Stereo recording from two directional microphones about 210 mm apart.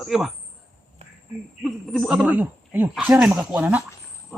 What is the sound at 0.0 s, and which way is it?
Speech, centre (ahead or behind).